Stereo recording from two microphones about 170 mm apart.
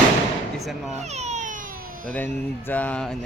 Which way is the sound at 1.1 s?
40° right (ahead or behind).